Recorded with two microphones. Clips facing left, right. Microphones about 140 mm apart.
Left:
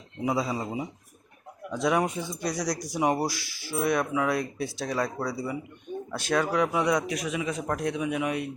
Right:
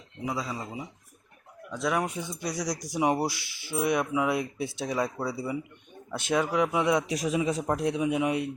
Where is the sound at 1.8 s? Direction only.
Centre (ahead or behind); by 6.6 s 20° right (ahead or behind).